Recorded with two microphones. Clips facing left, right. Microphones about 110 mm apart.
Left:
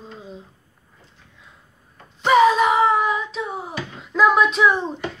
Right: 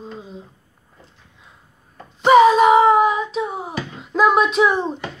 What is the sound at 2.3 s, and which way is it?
Wail, 10° right (ahead or behind).